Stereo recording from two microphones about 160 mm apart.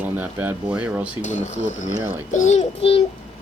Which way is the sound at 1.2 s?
50° left (ahead or behind).